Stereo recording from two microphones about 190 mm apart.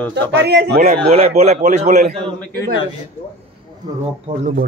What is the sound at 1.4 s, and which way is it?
Speech, 35° right (ahead or behind).